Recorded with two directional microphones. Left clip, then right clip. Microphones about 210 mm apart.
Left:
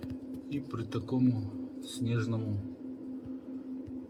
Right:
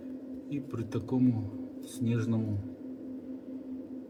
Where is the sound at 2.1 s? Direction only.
15° right (ahead or behind).